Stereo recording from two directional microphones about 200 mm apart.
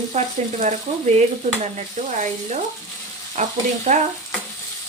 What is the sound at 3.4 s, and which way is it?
Sizzle, 35° right (ahead or behind).